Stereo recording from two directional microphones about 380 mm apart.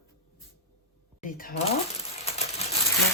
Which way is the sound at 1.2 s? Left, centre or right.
Left.